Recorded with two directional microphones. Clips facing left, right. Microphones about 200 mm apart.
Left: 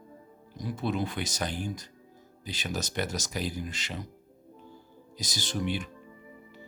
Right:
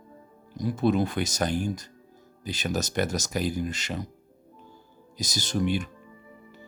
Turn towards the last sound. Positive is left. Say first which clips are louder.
# right 5 dB
turn(degrees=-45)  # may be behind; listen again after turning